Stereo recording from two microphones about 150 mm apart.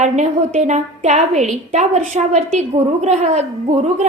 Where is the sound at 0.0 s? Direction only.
50° right (ahead or behind).